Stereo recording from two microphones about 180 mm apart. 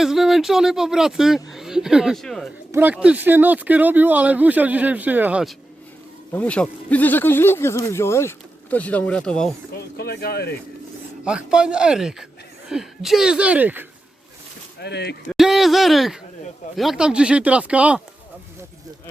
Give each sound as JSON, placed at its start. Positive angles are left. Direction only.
{"t": 0.0, "sound": "speech", "side_deg": 0}
{"t": 6.3, "sound": "speech", "side_deg": 5}
{"t": 9.7, "sound": "speech", "side_deg": 60}
{"t": 11.3, "sound": "speech", "side_deg": -5}
{"t": 14.8, "sound": "speech", "side_deg": 65}
{"t": 15.3, "sound": "speech", "side_deg": 0}